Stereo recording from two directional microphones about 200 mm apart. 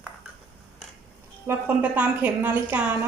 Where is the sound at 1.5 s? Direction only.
10° right (ahead or behind).